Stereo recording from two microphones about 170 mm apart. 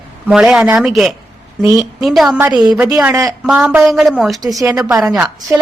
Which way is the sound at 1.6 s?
20° right (ahead or behind).